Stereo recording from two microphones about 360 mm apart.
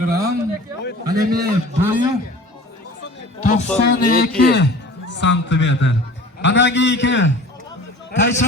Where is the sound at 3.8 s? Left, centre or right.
Left.